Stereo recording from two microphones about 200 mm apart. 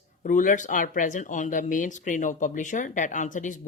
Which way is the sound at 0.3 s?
40° left (ahead or behind).